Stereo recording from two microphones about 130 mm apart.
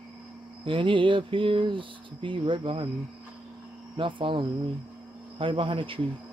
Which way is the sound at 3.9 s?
40° right (ahead or behind).